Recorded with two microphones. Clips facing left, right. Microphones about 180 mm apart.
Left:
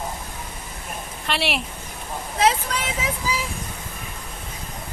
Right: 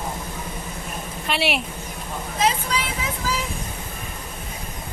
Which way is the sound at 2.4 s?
70° left (ahead or behind).